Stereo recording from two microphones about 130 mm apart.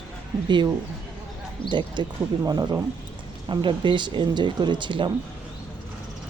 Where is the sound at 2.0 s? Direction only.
35° right (ahead or behind).